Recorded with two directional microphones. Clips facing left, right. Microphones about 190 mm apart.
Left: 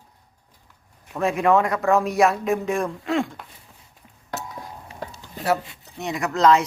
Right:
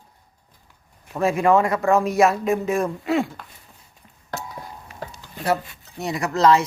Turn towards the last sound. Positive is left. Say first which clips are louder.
# even
turn(degrees=0)  # may be behind; listen again after turning